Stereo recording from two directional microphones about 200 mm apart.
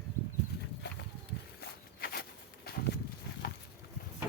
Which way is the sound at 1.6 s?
50° left (ahead or behind).